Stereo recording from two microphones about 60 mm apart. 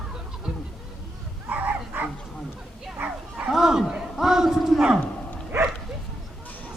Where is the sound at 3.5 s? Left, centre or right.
Centre.